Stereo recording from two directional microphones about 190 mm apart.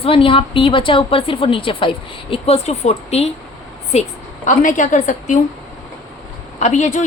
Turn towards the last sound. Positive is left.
turn(degrees=40)  # may be behind; listen again after turning